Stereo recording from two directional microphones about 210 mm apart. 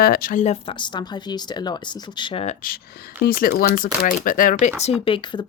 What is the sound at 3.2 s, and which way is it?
Speech, 45° left (ahead or behind).